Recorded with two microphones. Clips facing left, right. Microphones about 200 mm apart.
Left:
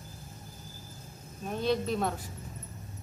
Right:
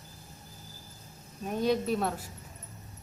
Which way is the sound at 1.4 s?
10° right (ahead or behind).